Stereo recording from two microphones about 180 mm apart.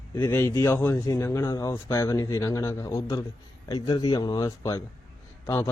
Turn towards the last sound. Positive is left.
turn(degrees=20)  # may be behind; listen again after turning